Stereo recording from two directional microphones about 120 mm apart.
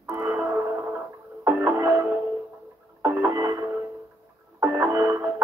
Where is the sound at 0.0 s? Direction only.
20° right (ahead or behind).